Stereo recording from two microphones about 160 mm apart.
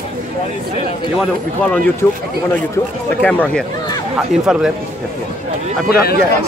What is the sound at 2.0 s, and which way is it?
Speech, 20° left (ahead or behind).